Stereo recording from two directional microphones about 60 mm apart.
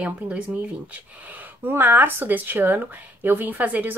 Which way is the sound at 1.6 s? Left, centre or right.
Right.